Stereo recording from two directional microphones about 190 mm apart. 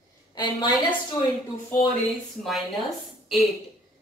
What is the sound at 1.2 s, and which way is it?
Speech, 20° left (ahead or behind).